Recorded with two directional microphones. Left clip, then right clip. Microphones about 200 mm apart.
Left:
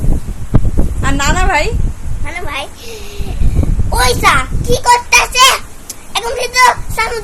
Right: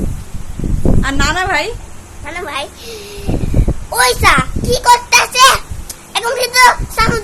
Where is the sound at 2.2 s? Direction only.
15° right (ahead or behind).